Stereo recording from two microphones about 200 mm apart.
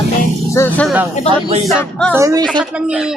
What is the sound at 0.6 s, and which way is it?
Speech, 15° left (ahead or behind).